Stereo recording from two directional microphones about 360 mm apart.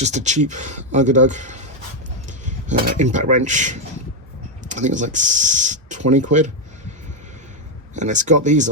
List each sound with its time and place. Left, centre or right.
0.0 s speech: centre
7.9 s speech: centre